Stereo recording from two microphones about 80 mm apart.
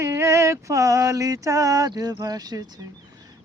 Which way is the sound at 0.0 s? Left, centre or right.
Right.